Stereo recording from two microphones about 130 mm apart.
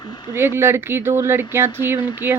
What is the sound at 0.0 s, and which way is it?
Speech, 35° left (ahead or behind).